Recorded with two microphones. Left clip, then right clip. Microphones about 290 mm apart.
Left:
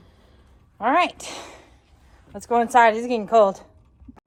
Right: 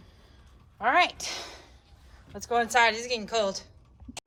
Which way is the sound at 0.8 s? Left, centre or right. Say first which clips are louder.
Left 3 dB; centre.